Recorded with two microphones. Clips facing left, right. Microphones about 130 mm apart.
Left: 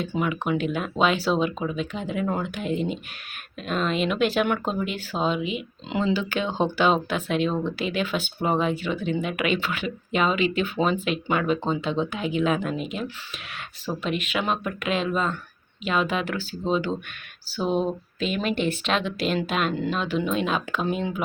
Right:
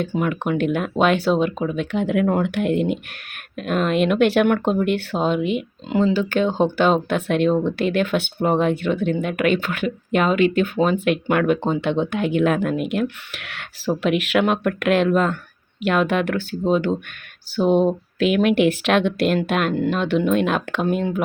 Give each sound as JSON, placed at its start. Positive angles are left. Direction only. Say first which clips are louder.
{"t": 0.2, "sound": "speech", "louder": "right 2 dB", "side_deg": -50}
{"t": 3.6, "sound": "speech", "louder": "right 6 dB", "side_deg": -55}
{"t": 18.2, "sound": "speech", "louder": "right 9 dB", "side_deg": -65}